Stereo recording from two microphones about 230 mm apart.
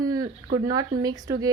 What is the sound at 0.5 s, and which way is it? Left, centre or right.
Speech, right.